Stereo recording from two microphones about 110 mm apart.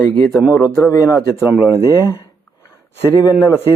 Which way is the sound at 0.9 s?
25° left (ahead or behind).